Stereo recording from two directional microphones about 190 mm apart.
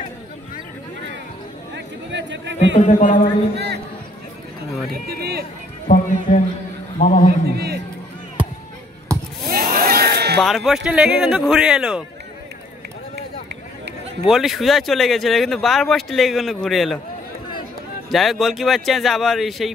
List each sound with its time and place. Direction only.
2.0 s a sound: 70° right (ahead or behind)
2.8 s speech: 40° left (ahead or behind)
3.5 s a sound: 60° right (ahead or behind)
5.0 s speech: 55° right (ahead or behind)
5.9 s speech: 40° left (ahead or behind)
7.5 s speech: 55° right (ahead or behind)
9.5 s a sound: 50° right (ahead or behind)
10.4 s speech: centre (ahead or behind)
14.3 s speech: centre (ahead or behind)
18.1 s speech: centre (ahead or behind)